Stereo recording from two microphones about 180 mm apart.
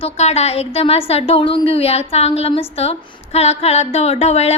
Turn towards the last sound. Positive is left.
turn(degrees=35)  # may be behind; listen again after turning